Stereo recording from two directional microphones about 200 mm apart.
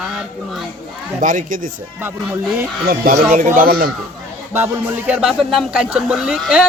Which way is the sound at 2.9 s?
45° right (ahead or behind).